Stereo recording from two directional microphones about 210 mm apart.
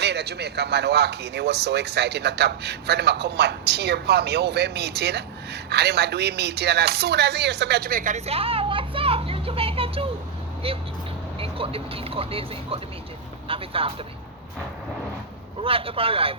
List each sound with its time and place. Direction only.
0.0 s speech: 50° right (ahead or behind); by 10.1 s 25° right (ahead or behind)
10.6 s vehicle: 25° right (ahead or behind)
11.3 s speech: 25° right (ahead or behind)
15.6 s speech: 25° right (ahead or behind)